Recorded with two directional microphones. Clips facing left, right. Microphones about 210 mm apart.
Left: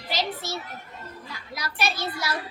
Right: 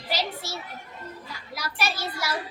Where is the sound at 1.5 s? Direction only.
10° right (ahead or behind).